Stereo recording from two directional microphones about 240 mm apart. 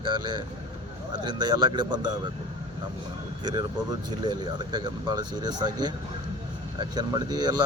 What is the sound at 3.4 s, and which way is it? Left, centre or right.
Speech, centre.